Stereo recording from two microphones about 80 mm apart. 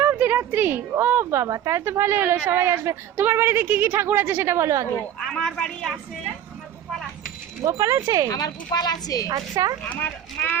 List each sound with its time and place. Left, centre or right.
0.0 s a woman's voice: right
5.2 s speech: centre
7.6 s speech: right
8.3 s speech: left
9.3 s speech: right
9.9 s speech: left